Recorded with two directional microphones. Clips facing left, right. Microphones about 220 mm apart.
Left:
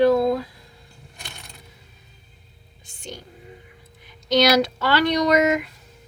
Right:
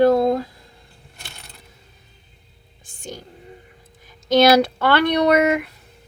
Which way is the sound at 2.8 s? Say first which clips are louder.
Right 2 dB; 50° right (ahead or behind).